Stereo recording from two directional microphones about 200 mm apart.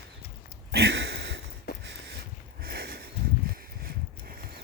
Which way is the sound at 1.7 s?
55° left (ahead or behind).